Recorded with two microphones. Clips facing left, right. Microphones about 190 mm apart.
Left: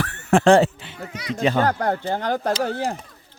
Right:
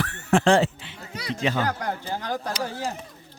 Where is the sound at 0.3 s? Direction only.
50° left (ahead or behind).